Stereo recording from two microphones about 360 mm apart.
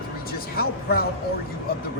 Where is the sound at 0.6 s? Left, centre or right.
Left.